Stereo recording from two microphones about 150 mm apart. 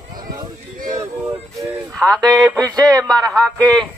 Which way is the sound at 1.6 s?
Centre (ahead or behind).